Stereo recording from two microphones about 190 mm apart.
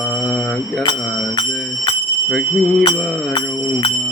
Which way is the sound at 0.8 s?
25° left (ahead or behind).